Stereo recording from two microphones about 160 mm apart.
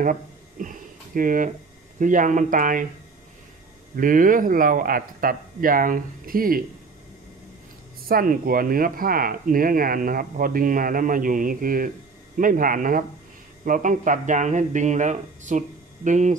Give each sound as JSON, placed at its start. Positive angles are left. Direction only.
{"t": 0.0, "sound": "a sound", "side_deg": -55}
{"t": 2.0, "sound": "speech", "side_deg": -55}
{"t": 3.9, "sound": "speech", "side_deg": -60}
{"t": 8.1, "sound": "speech", "side_deg": -65}